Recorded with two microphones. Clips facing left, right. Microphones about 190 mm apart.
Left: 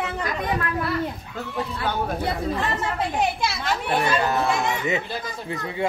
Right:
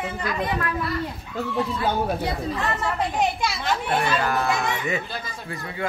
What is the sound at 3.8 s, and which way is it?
Speech, 20° left (ahead or behind).